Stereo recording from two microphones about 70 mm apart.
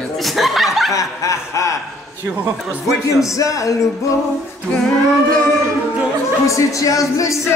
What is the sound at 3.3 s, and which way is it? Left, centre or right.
Snicker, left.